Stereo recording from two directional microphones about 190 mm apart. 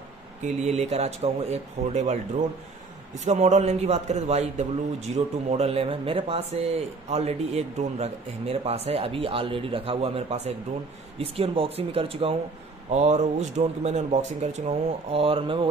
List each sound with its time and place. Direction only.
0.4 s a man's voice: 35° right (ahead or behind)
3.3 s a man's voice: 35° right (ahead or behind)